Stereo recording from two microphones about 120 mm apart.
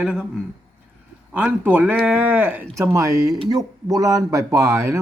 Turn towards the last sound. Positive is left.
turn(degrees=-25)  # may be behind; listen again after turning